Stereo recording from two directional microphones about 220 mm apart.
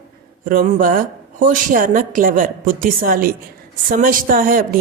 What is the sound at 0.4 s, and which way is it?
A woman's voice, 40° right (ahead or behind).